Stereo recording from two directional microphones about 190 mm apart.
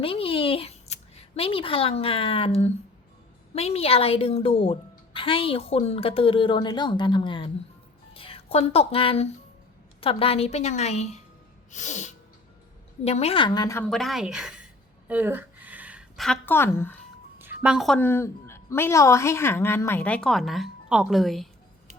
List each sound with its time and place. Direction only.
0.0 s a woman's voice: 30° left (ahead or behind)
13.8 s a woman's voice: centre (ahead or behind)
15.0 s a sound: 10° right (ahead or behind); by 16.9 s 10° left (ahead or behind)
17.3 s a woman's voice: 10° right (ahead or behind)